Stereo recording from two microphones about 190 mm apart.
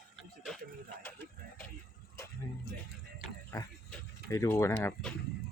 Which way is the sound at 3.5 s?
15° left (ahead or behind).